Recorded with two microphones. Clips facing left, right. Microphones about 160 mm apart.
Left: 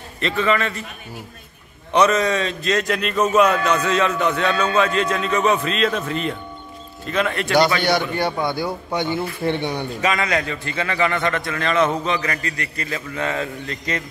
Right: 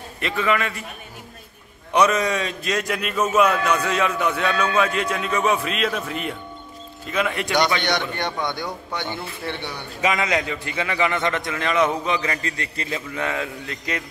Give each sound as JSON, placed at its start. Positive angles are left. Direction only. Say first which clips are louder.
{"t": 0.2, "sound": "a man's voice", "louder": "left 2 dB", "side_deg": -10}
{"t": 1.9, "sound": "a man's voice", "louder": "left 2 dB", "side_deg": -10}
{"t": 7.8, "sound": "a man's voice", "louder": "left 5 dB", "side_deg": 5}
{"t": 10.0, "sound": "a man's voice", "louder": "even", "side_deg": -15}